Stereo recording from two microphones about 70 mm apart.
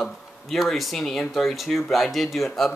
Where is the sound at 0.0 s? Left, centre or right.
Centre.